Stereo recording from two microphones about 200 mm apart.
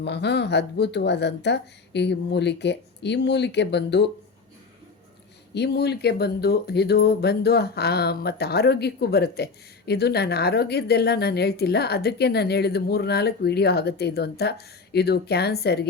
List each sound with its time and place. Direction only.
0.0 s speech: 60° left (ahead or behind)
5.5 s speech: 55° left (ahead or behind)